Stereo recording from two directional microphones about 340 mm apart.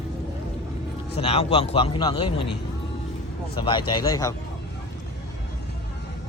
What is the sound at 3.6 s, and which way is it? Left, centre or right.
Speech, centre.